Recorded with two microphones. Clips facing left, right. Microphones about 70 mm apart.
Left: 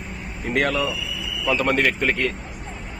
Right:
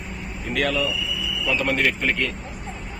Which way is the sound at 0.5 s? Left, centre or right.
Left.